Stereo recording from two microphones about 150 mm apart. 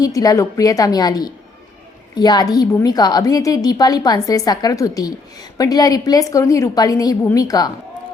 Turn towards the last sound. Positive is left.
turn(degrees=25)  # may be behind; listen again after turning